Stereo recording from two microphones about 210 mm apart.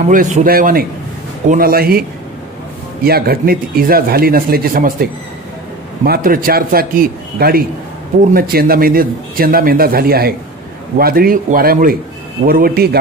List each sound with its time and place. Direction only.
0.0 s a man's voice: 40° right (ahead or behind)
6.0 s a man's voice: 45° right (ahead or behind)